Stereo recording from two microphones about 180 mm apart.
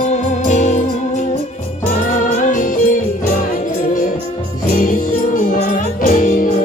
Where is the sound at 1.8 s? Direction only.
50° left (ahead or behind).